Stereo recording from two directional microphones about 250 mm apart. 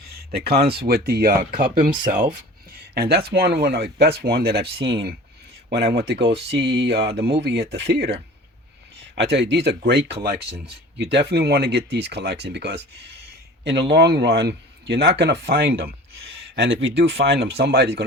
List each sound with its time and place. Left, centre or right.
0.1 s a sound: right
0.8 s speech: right
9.1 s speech: right